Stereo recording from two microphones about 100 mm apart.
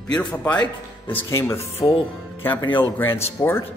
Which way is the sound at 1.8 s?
60° left (ahead or behind).